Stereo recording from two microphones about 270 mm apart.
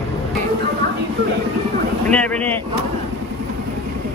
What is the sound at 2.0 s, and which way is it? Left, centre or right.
Speech, centre.